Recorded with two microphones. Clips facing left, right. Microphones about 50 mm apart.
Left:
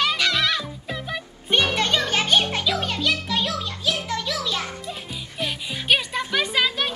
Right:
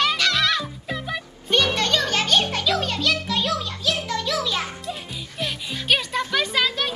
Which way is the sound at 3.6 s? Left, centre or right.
Centre.